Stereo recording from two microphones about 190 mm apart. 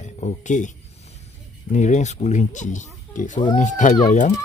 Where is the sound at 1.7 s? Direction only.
40° left (ahead or behind).